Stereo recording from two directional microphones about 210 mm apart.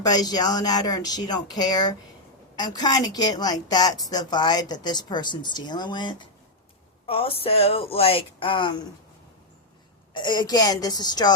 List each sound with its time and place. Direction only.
0.1 s speech: 20° left (ahead or behind)
10.2 s speech: 20° left (ahead or behind)